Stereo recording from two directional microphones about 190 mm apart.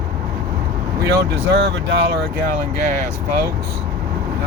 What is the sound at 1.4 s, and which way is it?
Speech, 65° right (ahead or behind).